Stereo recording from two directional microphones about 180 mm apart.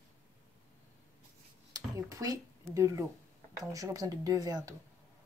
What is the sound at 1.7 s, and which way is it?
Speech, 20° right (ahead or behind).